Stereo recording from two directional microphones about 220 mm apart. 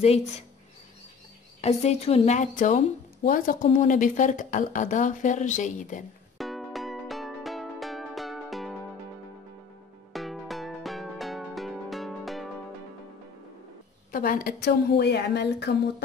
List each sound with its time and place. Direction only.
0.0 s speech: 30° left (ahead or behind)
1.6 s speech: 30° left (ahead or behind)
6.3 s music: centre (ahead or behind)
10.1 s music: centre (ahead or behind)
14.1 s a woman's voice: 40° left (ahead or behind)